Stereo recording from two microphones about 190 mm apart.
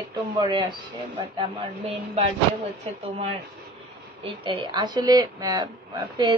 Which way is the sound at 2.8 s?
35° right (ahead or behind).